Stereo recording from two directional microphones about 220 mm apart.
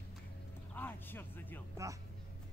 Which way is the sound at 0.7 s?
10° left (ahead or behind).